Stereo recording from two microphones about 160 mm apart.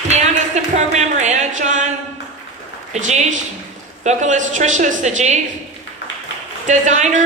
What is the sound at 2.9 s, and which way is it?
Speech, 45° right (ahead or behind).